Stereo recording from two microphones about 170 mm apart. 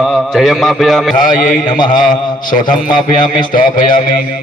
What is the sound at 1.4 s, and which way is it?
A man's voice, 50° left (ahead or behind).